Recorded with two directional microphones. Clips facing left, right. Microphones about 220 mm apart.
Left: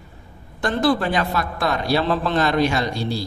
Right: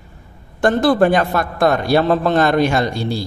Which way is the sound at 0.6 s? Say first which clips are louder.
Right 6 dB; 50° right (ahead or behind).